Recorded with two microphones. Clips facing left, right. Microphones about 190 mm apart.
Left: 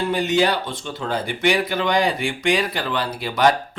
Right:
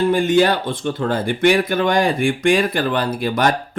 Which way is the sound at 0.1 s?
50° right (ahead or behind).